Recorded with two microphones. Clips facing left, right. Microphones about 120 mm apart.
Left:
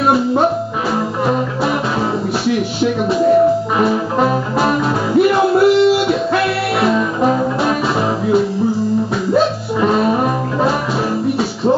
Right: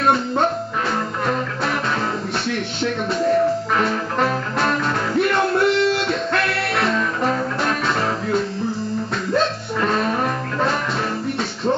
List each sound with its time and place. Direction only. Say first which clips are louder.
0.0 s music: left 5 dB; 5° left (ahead or behind)
2.4 s music: left 9 dB; 5° left (ahead or behind)
9.3 s music: left 5 dB; 5° left (ahead or behind)